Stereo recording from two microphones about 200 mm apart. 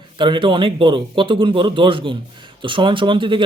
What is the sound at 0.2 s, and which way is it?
Speech, 25° right (ahead or behind).